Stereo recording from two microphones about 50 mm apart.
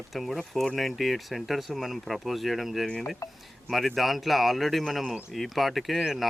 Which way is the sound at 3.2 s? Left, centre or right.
Left.